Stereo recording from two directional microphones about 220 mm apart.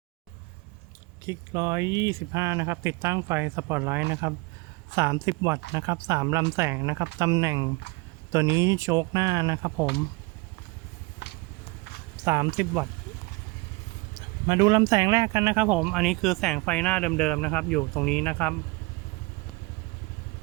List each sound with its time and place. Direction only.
1.3 s speech: 15° right (ahead or behind)
11.2 s vehicle: 50° left (ahead or behind)
12.2 s speech: 15° right (ahead or behind)
14.2 s speech: 15° right (ahead or behind); by 18.5 s 5° left (ahead or behind)